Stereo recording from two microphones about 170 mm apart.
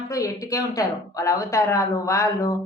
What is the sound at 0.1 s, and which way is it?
A woman's voice, 20° left (ahead or behind).